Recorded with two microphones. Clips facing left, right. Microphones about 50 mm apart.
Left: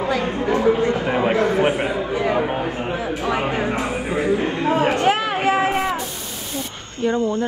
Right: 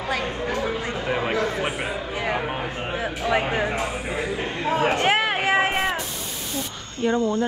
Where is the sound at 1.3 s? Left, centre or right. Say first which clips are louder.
Left 7 dB; left.